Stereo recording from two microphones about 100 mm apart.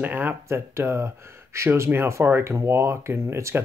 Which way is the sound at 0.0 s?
20° right (ahead or behind).